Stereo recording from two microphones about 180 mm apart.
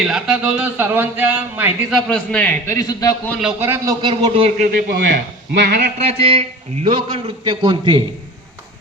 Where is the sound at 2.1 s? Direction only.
5° left (ahead or behind).